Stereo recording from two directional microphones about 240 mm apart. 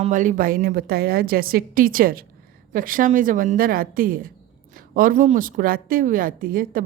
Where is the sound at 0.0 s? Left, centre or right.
Right.